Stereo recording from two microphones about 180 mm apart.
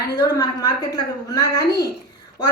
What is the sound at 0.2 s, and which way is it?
A woman's voice, 20° left (ahead or behind).